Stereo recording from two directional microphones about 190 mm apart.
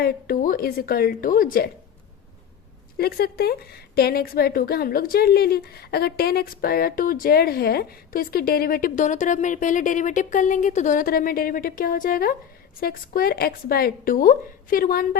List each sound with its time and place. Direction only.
0.0 s a woman's voice: 50° left (ahead or behind)
3.0 s a woman's voice: 55° left (ahead or behind)